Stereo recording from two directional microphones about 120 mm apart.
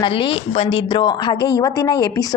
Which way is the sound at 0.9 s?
40° left (ahead or behind).